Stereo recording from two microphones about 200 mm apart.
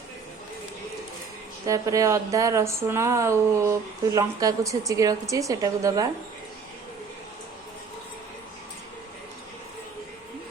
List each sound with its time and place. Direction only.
1.6 s speech: 15° right (ahead or behind)